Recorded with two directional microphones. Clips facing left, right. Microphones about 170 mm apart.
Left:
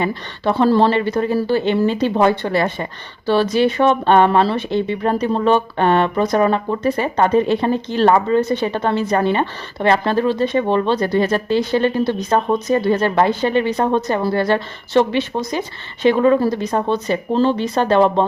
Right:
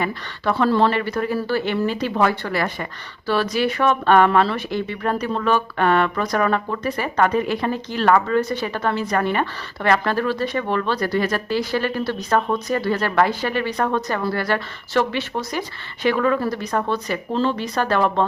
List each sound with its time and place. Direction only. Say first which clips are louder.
0.0 s speech: left 4 dB; 25° left (ahead or behind)